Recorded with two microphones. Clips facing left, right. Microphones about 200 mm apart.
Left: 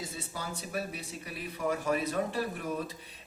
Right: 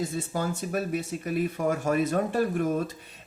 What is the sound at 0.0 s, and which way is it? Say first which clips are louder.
Speech: right 10 dB; 50° right (ahead or behind).